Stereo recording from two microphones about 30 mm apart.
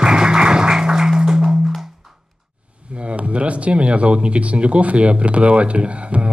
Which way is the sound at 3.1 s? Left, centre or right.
Right.